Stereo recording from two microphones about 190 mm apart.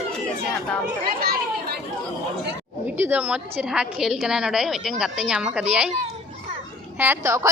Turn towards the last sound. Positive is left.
turn(degrees=-15)  # may be behind; listen again after turning